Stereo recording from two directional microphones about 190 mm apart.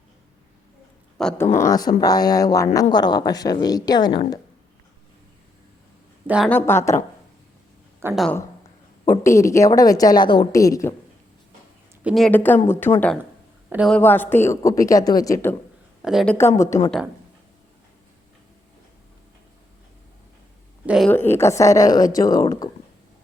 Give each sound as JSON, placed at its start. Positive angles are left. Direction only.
{"t": 1.2, "sound": "speech", "side_deg": 5}
{"t": 1.6, "sound": "a woman's voice", "side_deg": 20}
{"t": 6.2, "sound": "speech", "side_deg": -5}
{"t": 6.5, "sound": "a woman's voice", "side_deg": 10}
{"t": 8.1, "sound": "speech", "side_deg": 0}
{"t": 9.0, "sound": "a woman's voice", "side_deg": 15}
{"t": 12.0, "sound": "a woman's voice", "side_deg": 0}
{"t": 13.7, "sound": "a man's voice", "side_deg": -5}
{"t": 13.9, "sound": "a woman's voice", "side_deg": 10}
{"t": 16.0, "sound": "speech", "side_deg": 0}
{"t": 20.8, "sound": "speech", "side_deg": -5}
{"t": 21.1, "sound": "a woman's voice", "side_deg": 10}